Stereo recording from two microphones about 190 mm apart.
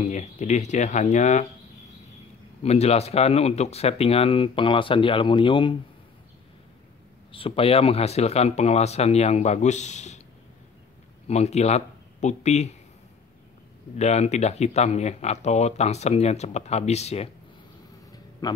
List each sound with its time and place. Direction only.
0.0 s speech: 35° left (ahead or behind)
2.6 s speech: 35° left (ahead or behind)
7.3 s speech: 30° left (ahead or behind)
11.2 s speech: 35° left (ahead or behind)
13.9 s speech: 35° left (ahead or behind)
18.4 s a man's voice: 20° left (ahead or behind)